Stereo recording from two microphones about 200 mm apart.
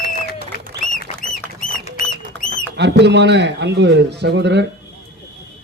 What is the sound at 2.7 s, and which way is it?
Speech, 60° right (ahead or behind).